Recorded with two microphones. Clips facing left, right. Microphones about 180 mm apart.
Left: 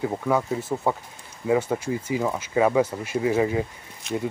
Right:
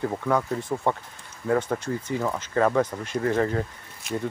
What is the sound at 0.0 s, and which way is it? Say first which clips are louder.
Speech: left 1 dB; 5° left (ahead or behind).